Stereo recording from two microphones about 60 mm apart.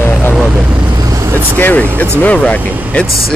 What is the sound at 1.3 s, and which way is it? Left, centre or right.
Speech, left.